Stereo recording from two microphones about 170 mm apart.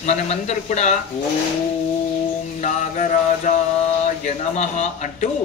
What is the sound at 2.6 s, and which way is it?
A man's voice, 45° left (ahead or behind).